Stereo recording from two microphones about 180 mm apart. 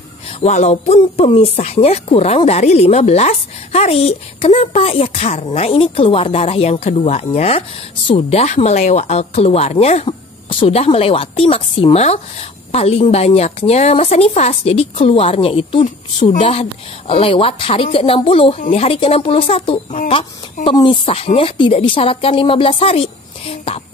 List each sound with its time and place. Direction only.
0.3 s speech: 40° left (ahead or behind)